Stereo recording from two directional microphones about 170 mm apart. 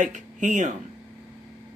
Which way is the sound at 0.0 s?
45° right (ahead or behind).